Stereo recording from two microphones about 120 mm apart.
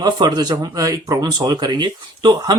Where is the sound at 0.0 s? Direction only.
35° right (ahead or behind).